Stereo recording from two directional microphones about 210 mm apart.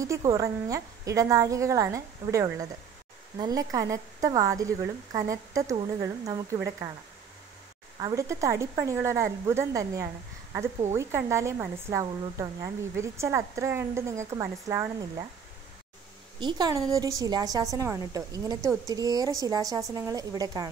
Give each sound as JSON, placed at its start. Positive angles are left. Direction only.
{"t": 0.0, "sound": "speech", "side_deg": -15}
{"t": 8.0, "sound": "speech", "side_deg": -15}
{"t": 16.3, "sound": "speech", "side_deg": -20}